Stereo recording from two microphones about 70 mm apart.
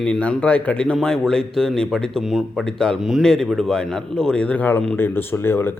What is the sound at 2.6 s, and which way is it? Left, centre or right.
Speech, centre.